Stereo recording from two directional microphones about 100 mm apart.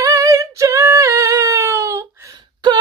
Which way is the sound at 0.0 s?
35° right (ahead or behind).